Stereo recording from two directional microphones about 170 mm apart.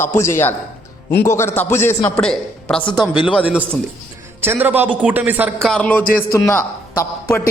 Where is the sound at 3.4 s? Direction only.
10° right (ahead or behind).